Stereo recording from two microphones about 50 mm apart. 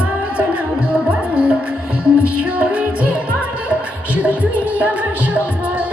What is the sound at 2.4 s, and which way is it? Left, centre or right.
Music, right.